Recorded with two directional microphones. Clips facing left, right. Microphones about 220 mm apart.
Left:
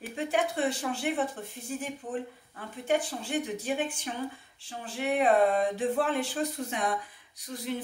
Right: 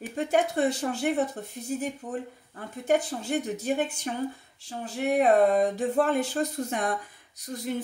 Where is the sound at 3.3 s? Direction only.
40° right (ahead or behind).